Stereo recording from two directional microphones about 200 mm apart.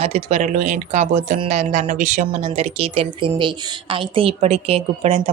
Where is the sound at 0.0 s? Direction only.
30° right (ahead or behind).